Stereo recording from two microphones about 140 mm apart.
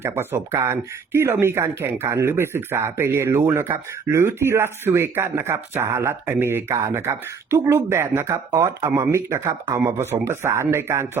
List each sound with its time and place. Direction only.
0.0 s speech: 15° right (ahead or behind)